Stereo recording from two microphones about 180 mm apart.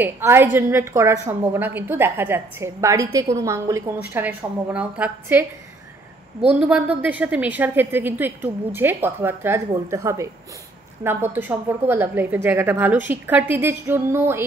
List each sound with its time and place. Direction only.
0.0 s a woman's voice: 15° right (ahead or behind)
6.5 s a woman's voice: 5° right (ahead or behind)